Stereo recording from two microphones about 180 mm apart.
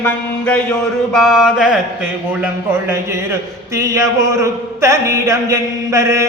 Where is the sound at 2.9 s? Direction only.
15° right (ahead or behind).